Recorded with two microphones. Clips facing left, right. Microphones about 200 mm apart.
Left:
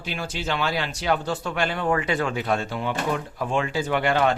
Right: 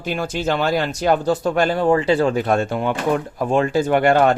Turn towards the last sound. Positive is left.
turn(degrees=-50)  # may be behind; listen again after turning